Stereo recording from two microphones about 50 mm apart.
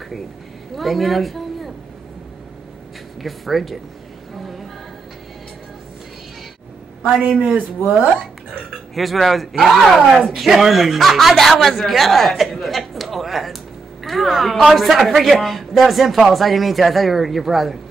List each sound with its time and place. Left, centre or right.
0.7 s a woman's voice: centre
3.2 s speech: centre
4.4 s a sound: centre
7.2 s a man's voice: right
8.9 s speech: centre
11.6 s a sound: centre
14.0 s a woman's voice: centre